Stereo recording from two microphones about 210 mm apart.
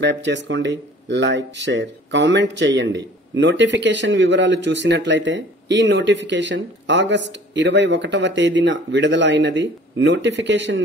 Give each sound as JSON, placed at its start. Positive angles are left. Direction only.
{"t": 0.0, "sound": "speech", "side_deg": -60}